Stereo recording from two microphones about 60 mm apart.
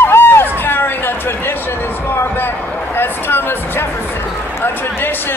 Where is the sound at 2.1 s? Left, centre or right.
Left.